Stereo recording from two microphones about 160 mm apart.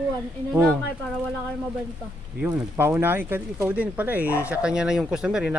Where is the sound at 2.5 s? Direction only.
15° right (ahead or behind).